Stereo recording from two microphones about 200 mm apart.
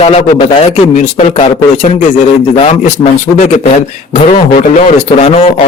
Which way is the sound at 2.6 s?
30° left (ahead or behind).